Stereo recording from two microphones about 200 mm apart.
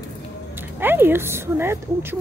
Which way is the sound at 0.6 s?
10° right (ahead or behind).